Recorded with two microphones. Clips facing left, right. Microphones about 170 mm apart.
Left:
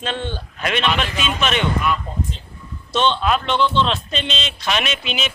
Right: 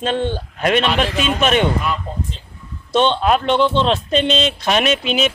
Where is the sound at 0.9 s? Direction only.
30° right (ahead or behind).